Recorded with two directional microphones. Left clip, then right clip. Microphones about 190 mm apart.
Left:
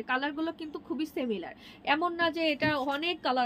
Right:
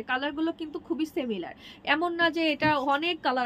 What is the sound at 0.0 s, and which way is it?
A woman's voice, 20° right (ahead or behind).